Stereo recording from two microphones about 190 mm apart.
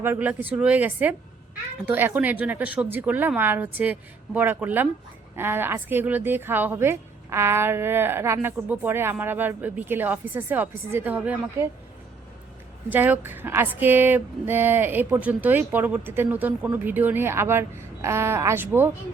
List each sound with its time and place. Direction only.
0.0 s a woman's voice: 10° right (ahead or behind)
12.9 s a woman's voice: 10° right (ahead or behind)